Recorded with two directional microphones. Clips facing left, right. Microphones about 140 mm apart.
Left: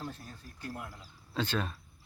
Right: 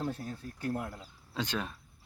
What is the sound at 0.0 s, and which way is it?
Speech, 55° right (ahead or behind).